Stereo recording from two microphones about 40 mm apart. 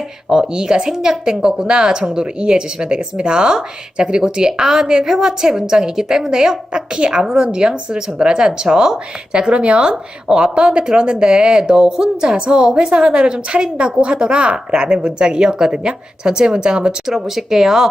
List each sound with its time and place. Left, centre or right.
0.3 s a woman's voice: centre
17.1 s a woman's voice: centre